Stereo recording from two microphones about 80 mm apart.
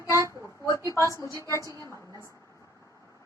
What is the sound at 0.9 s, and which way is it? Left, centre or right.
Speech, left.